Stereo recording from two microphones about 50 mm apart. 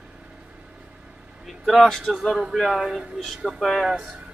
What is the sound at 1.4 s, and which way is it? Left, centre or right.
Speech, centre.